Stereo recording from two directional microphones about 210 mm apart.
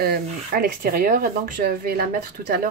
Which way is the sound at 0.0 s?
45° right (ahead or behind).